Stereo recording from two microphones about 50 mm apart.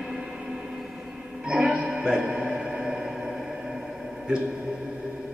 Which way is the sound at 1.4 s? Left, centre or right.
Right.